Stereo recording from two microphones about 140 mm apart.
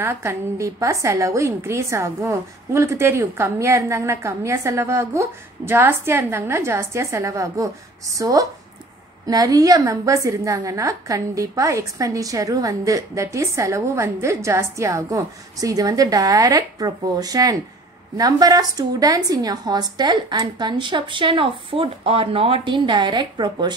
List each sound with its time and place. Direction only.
0.0 s a woman's voice: 20° right (ahead or behind)